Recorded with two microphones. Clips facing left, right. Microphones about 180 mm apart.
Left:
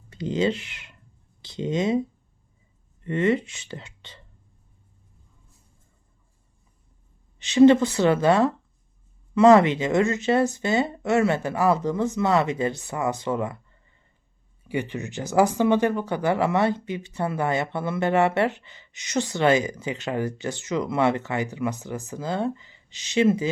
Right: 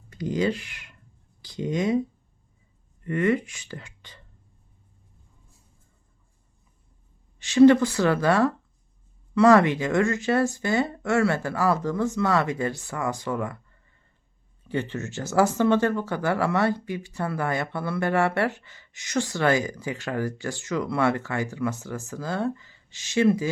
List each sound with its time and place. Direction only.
0.1 s speech: 25° left (ahead or behind)
7.3 s speech: 20° left (ahead or behind)
14.6 s speech: 10° left (ahead or behind)